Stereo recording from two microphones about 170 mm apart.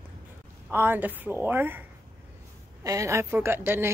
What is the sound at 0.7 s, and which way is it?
A woman's voice, 15° right (ahead or behind).